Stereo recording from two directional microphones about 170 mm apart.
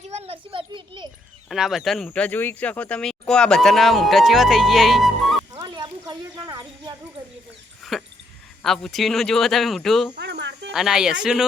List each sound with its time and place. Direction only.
0.1 s a sound: 35° right (ahead or behind)
1.5 s speech: centre (ahead or behind)
5.5 s snake: 25° right (ahead or behind)
7.9 s dog: centre (ahead or behind)
8.6 s speech: centre (ahead or behind)
10.2 s a sound: 80° right
10.7 s speech: 5° right (ahead or behind)